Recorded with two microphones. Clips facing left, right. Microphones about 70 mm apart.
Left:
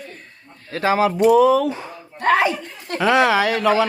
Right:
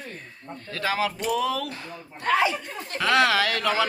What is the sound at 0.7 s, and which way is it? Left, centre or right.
Speech, left.